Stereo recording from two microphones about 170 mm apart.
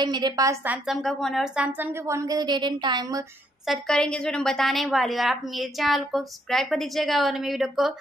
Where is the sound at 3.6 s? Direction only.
Centre (ahead or behind).